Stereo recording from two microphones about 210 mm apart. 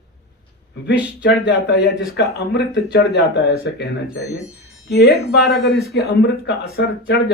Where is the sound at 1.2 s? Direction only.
50° left (ahead or behind).